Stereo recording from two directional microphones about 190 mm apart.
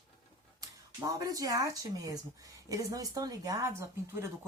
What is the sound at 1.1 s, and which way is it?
A woman's voice, 20° right (ahead or behind).